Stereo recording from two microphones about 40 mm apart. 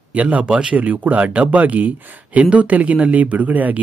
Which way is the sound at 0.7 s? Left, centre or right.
Right.